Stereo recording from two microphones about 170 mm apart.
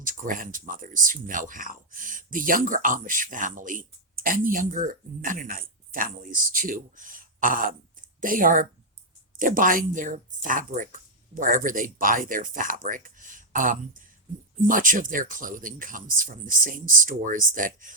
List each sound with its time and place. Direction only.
0.0 s speech: 50° right (ahead or behind)